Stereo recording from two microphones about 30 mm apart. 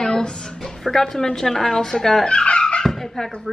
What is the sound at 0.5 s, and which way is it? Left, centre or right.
Speech, centre.